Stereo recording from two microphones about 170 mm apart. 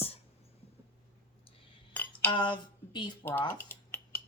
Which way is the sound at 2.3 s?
30° left (ahead or behind).